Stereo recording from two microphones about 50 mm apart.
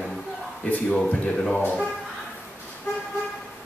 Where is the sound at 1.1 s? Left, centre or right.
Centre.